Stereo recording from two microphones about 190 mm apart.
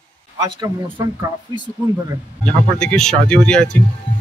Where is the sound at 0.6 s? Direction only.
25° right (ahead or behind).